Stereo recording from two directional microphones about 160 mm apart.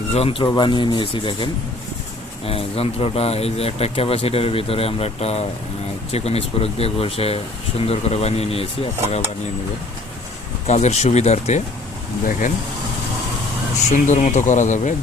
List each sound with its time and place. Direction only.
0.1 s speech: 35° left (ahead or behind)
0.4 s speech: 25° left (ahead or behind)
2.5 s speech: 40° left (ahead or behind)
10.7 s speech: 45° left (ahead or behind)
13.9 s speech: 50° left (ahead or behind)